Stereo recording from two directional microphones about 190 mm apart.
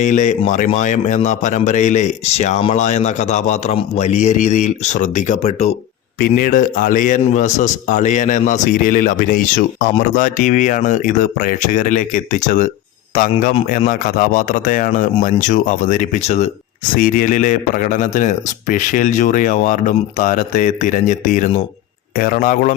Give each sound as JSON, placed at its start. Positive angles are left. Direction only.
{"t": 0.0, "sound": "a man's voice", "side_deg": 40}
{"t": 6.1, "sound": "speech", "side_deg": 45}
{"t": 16.9, "sound": "speech", "side_deg": 45}